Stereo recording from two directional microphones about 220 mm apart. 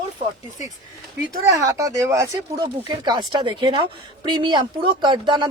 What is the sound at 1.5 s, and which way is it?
Speech, 15° right (ahead or behind).